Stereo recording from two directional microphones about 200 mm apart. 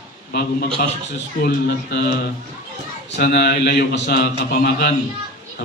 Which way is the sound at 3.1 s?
50° left (ahead or behind).